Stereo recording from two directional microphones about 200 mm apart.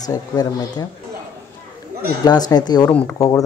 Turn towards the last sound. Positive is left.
turn(degrees=10)  # may be behind; listen again after turning